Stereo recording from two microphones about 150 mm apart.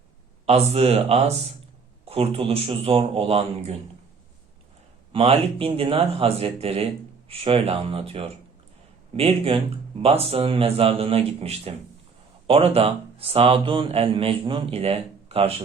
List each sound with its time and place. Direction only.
0.4 s speech: 45° right (ahead or behind)
5.1 s speech: 40° right (ahead or behind)